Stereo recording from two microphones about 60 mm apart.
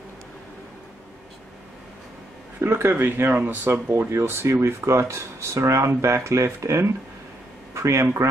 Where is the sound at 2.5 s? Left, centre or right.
Right.